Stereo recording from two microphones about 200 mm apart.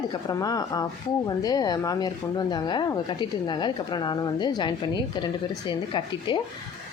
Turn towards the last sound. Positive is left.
turn(degrees=25)  # may be behind; listen again after turning